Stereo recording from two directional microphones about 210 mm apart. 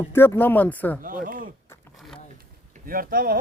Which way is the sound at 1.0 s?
40° right (ahead or behind).